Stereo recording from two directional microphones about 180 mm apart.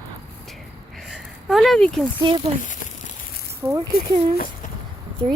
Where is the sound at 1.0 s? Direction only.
Centre (ahead or behind).